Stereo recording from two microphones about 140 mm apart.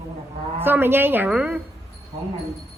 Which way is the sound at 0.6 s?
15° right (ahead or behind).